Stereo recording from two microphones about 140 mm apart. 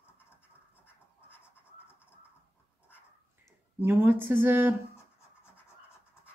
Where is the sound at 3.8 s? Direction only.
15° right (ahead or behind).